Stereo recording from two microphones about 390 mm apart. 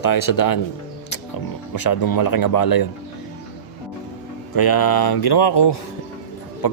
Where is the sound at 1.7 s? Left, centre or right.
Left.